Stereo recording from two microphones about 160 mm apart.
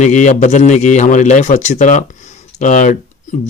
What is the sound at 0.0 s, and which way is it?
Speech, 50° left (ahead or behind).